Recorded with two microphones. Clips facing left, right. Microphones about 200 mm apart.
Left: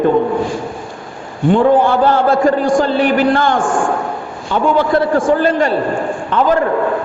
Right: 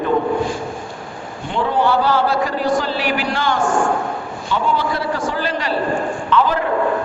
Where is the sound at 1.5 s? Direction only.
50° left (ahead or behind).